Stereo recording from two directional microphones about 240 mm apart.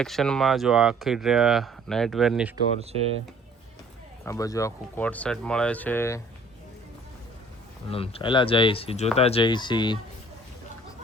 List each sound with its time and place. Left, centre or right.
0.0 s speech: centre
4.3 s speech: centre
7.9 s speech: left